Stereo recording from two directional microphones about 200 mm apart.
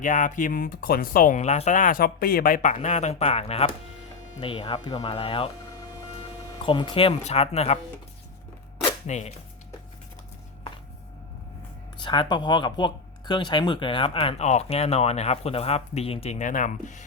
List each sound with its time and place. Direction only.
0.0 s speech: 40° left (ahead or behind)
6.6 s speech: 25° left (ahead or behind)
9.0 s speech: 35° left (ahead or behind)
11.9 s speech: 25° left (ahead or behind)